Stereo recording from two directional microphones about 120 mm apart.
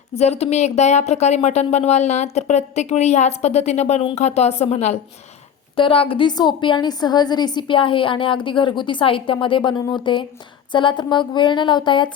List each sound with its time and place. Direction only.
0.2 s speech: 60° left (ahead or behind)
5.7 s a woman's voice: 50° left (ahead or behind)